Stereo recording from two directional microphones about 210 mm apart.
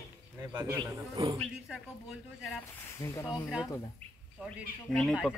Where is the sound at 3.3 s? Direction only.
5° right (ahead or behind).